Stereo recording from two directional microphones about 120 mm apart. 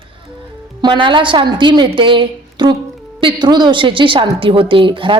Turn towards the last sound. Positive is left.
turn(degrees=-45)  # may be behind; listen again after turning